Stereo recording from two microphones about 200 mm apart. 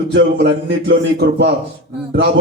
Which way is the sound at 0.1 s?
55° right (ahead or behind).